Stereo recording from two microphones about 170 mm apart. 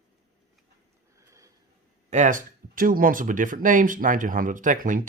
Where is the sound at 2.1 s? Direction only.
50° right (ahead or behind).